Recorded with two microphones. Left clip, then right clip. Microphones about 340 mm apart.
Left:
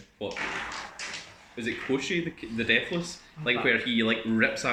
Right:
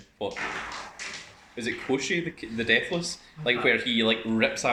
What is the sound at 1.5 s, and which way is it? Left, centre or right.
Speech, centre.